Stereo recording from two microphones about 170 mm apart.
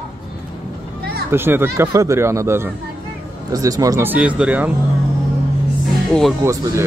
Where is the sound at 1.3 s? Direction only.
15° right (ahead or behind).